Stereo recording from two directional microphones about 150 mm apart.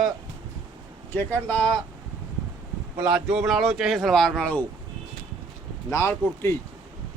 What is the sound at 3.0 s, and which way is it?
Speech, 5° right (ahead or behind).